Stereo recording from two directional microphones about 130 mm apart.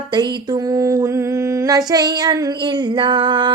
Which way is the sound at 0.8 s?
25° right (ahead or behind).